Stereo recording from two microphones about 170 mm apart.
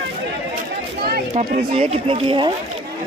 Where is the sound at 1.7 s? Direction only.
35° right (ahead or behind).